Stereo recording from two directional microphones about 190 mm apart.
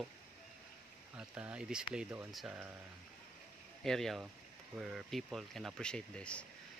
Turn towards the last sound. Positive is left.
turn(degrees=5)  # may be behind; listen again after turning